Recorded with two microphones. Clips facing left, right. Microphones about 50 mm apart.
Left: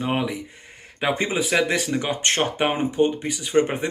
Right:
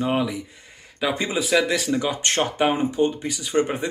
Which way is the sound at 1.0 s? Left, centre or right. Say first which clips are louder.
Left 1 dB; left.